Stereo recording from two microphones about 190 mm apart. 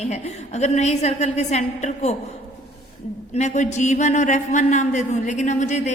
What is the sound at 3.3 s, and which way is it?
A man's voice, 35° left (ahead or behind).